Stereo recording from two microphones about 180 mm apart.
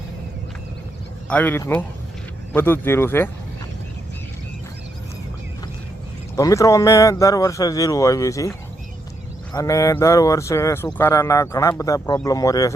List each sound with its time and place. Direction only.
1.3 s speech: 10° left (ahead or behind)
6.3 s speech: 15° left (ahead or behind)
9.5 s speech: 20° left (ahead or behind)